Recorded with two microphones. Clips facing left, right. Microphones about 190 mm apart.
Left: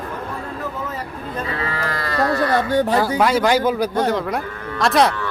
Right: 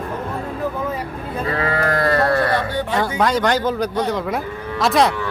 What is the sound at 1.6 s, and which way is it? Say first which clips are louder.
Livestock: right 6 dB; 45° right (ahead or behind).